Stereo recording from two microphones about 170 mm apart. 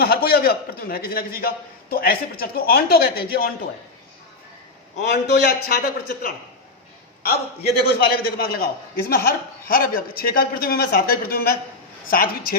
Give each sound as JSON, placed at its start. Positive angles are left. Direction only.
{"t": 0.0, "sound": "a man's voice", "side_deg": 65}
{"t": 5.0, "sound": "a man's voice", "side_deg": 80}